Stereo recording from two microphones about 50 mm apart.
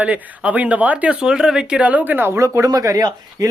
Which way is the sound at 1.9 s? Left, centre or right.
Right.